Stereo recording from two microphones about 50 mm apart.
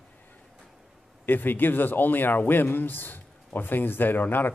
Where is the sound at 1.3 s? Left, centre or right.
Left.